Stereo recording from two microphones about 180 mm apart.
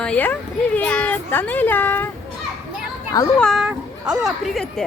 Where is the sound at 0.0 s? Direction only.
10° left (ahead or behind).